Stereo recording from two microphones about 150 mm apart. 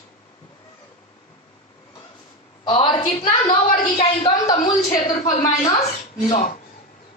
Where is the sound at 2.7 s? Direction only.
30° left (ahead or behind).